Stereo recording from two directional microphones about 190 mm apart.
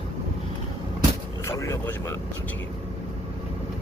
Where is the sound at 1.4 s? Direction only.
15° left (ahead or behind).